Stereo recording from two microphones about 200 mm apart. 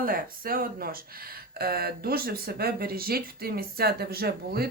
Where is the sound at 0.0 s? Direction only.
45° right (ahead or behind).